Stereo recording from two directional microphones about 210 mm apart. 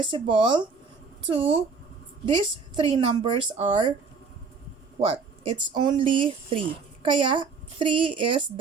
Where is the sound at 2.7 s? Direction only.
25° right (ahead or behind).